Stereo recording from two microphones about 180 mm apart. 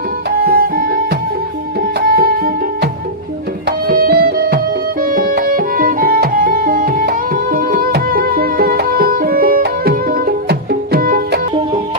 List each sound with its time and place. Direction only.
0.3 s music: 55° right (ahead or behind)
2.0 s music: 55° right (ahead or behind)